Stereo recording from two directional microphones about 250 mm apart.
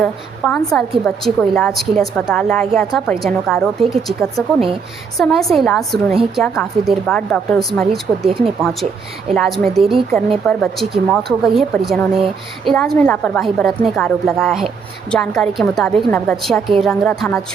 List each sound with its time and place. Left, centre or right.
0.0 s a woman's voice: centre
8.3 s speech: right
9.3 s a woman's voice: centre